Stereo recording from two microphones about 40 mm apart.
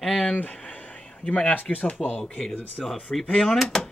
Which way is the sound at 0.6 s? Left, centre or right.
Left.